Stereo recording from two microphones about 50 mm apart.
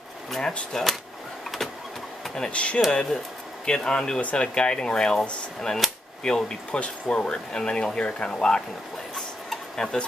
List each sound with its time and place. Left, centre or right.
0.4 s speech: centre
2.5 s speech: left
2.9 s speech: centre
5.8 s cap gun: centre
6.2 s speech: centre
9.1 s a sound: centre